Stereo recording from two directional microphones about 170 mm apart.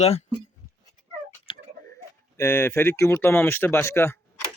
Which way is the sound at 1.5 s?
30° left (ahead or behind).